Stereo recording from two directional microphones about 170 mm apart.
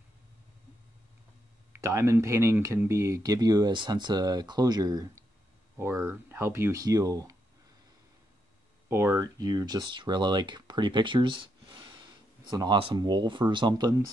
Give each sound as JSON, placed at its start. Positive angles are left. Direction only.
{"t": 1.7, "sound": "speech", "side_deg": -15}
{"t": 8.8, "sound": "speech", "side_deg": -15}